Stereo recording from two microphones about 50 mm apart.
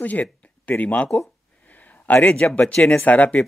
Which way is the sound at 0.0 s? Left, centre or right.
Left.